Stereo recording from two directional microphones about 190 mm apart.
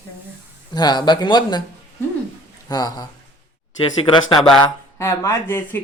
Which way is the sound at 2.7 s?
20° left (ahead or behind).